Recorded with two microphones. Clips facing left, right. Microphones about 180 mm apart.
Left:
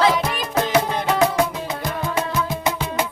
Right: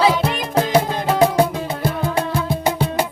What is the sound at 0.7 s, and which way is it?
Music, 30° right (ahead or behind).